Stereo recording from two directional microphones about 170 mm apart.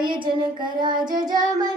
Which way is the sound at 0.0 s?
30° right (ahead or behind).